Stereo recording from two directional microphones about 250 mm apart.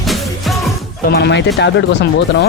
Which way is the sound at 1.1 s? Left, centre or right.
Left.